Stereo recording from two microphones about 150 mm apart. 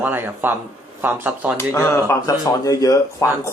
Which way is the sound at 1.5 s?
15° left (ahead or behind).